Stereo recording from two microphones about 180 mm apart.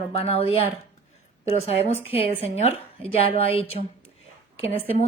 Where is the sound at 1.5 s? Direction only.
35° left (ahead or behind).